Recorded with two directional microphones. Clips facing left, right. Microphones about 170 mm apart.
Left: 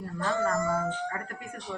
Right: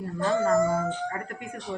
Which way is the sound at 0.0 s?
20° right (ahead or behind).